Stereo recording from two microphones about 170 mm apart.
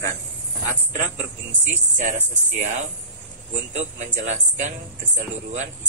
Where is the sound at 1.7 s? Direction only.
45° right (ahead or behind).